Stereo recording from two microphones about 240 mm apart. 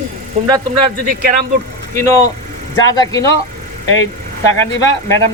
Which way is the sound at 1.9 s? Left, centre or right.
Centre.